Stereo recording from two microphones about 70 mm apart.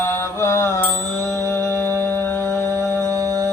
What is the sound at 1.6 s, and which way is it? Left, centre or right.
Music, left.